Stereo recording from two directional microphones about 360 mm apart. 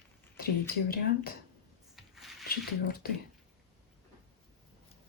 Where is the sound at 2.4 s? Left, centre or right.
Left.